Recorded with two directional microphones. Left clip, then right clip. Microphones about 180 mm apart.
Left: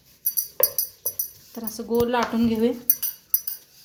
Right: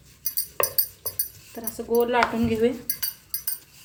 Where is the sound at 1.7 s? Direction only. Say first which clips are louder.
Right 1 dB; 25° left (ahead or behind).